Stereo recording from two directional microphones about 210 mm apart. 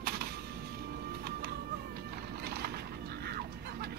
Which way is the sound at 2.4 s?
50° right (ahead or behind).